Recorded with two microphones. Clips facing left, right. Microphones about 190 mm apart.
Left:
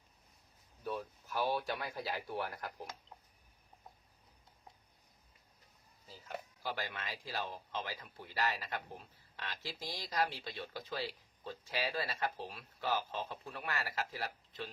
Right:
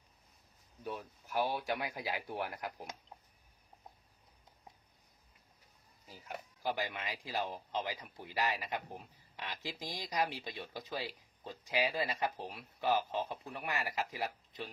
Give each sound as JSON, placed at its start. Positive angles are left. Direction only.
{"t": 0.9, "sound": "speech", "side_deg": -15}
{"t": 6.1, "sound": "speech", "side_deg": -15}